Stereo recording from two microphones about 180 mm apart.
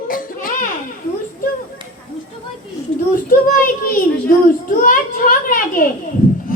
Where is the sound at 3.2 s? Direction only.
55° left (ahead or behind).